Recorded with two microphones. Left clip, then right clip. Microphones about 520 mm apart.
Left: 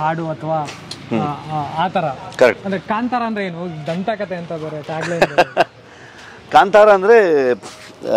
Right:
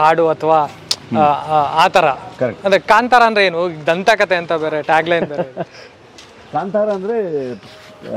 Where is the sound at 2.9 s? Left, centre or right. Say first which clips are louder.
Right 9 dB; right.